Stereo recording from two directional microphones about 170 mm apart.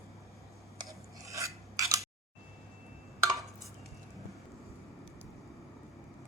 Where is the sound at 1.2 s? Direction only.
20° right (ahead or behind).